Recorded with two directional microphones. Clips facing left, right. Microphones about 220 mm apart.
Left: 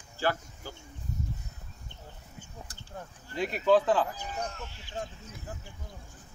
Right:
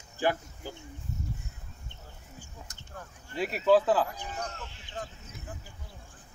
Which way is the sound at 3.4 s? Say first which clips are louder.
Right 1 dB; 5° right (ahead or behind).